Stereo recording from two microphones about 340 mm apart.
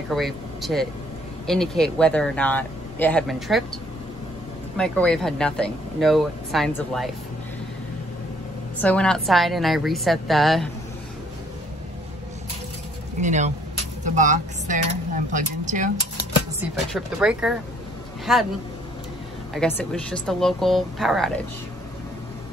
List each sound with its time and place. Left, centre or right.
0.1 s speech: centre
4.7 s speech: centre
8.8 s speech: centre
13.2 s speech: right
16.7 s speech: centre
19.5 s speech: centre